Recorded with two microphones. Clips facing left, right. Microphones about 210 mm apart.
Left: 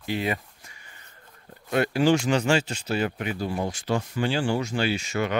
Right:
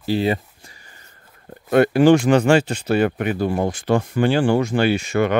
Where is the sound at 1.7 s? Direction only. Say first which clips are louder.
Right 8 dB; 55° right (ahead or behind).